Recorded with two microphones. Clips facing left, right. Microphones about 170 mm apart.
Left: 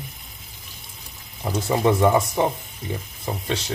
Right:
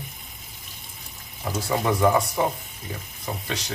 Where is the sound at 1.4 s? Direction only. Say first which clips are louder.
Left 4 dB; 20° left (ahead or behind).